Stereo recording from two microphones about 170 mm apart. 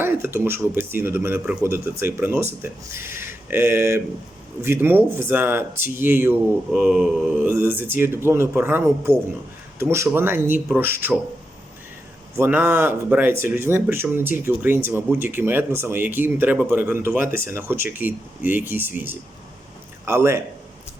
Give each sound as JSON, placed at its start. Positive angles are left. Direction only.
{"t": 0.0, "sound": "speech", "side_deg": -15}
{"t": 12.4, "sound": "speech", "side_deg": -10}